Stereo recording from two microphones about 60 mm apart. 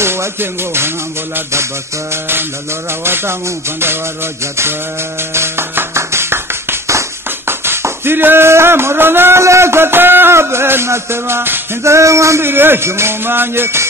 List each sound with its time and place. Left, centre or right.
0.0 s music: right
2.9 s music: right
5.3 s music: right
7.4 s speech: right
9.4 s music: right
11.8 s a sound: right
12.4 s music: right